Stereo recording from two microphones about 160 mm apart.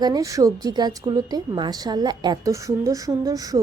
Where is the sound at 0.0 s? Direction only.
20° right (ahead or behind).